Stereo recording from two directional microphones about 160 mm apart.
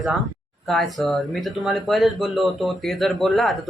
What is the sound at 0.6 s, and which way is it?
Speech, centre (ahead or behind).